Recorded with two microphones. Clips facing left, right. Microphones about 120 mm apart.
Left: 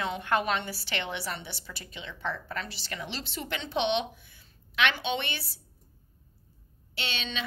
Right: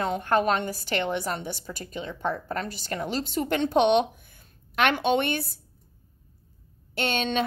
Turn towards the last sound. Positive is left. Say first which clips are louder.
# right 10 dB
turn(degrees=-50)  # may be behind; listen again after turning